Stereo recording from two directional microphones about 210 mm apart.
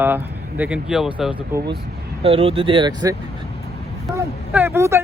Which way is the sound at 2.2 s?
25° right (ahead or behind).